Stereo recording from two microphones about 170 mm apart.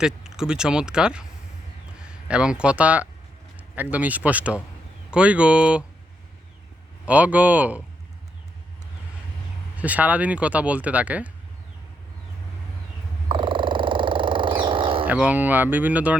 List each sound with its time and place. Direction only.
0.0 s speech: 5° right (ahead or behind)
7.0 s speech: 10° right (ahead or behind)
9.7 s speech: 10° right (ahead or behind)
13.2 s purr: 30° right (ahead or behind)
15.0 s speech: 10° right (ahead or behind)